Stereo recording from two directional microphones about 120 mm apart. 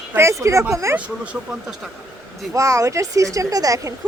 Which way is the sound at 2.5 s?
25° right (ahead or behind).